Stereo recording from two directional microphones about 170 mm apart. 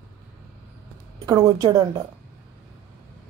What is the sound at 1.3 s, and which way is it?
Speech, 25° right (ahead or behind).